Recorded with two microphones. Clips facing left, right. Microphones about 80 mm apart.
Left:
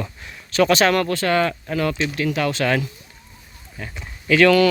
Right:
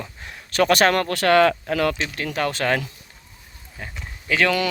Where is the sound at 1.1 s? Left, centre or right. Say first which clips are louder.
Right 3 dB; right.